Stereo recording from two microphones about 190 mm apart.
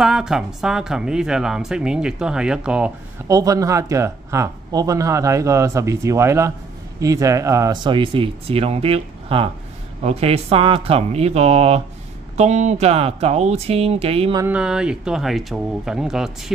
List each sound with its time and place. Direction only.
0.0 s speech: 5° right (ahead or behind)
3.3 s speech: 15° right (ahead or behind)
14.3 s speech: 10° right (ahead or behind)